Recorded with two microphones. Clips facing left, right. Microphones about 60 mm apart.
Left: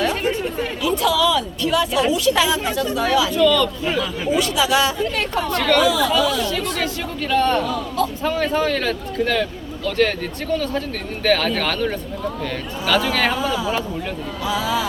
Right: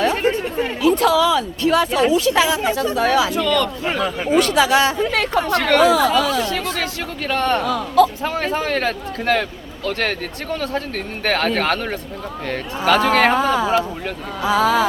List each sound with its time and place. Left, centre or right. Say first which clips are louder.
0.0 s speech: right 2 dB; right
3.4 s speech: left 3 dB; right
3.8 s speech: right 1 dB; right